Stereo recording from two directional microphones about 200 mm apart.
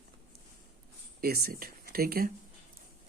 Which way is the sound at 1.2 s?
50° right (ahead or behind).